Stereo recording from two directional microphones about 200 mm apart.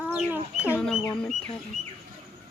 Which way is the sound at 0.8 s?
5° left (ahead or behind).